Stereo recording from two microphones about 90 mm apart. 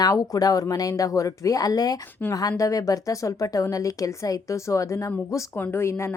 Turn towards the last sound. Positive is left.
turn(degrees=30)  # may be behind; listen again after turning